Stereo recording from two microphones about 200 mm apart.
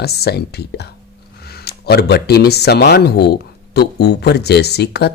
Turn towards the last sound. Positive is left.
turn(degrees=55)  # may be behind; listen again after turning